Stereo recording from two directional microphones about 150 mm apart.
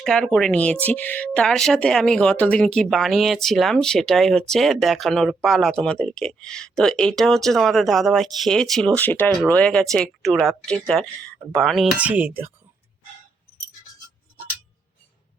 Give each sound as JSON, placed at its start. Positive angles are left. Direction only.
{"t": 0.0, "sound": "speech", "side_deg": 5}